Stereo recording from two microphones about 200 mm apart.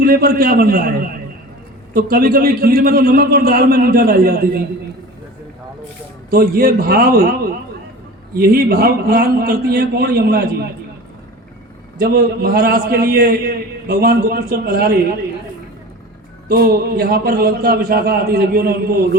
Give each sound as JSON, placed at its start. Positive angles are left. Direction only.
{"t": 0.0, "sound": "a man's voice", "side_deg": -50}
{"t": 6.3, "sound": "a man's voice", "side_deg": -50}
{"t": 8.4, "sound": "a man's voice", "side_deg": -50}
{"t": 11.9, "sound": "a man's voice", "side_deg": -50}
{"t": 16.5, "sound": "a man's voice", "side_deg": -50}